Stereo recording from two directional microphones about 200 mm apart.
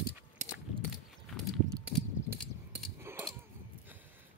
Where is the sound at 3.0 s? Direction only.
10° right (ahead or behind).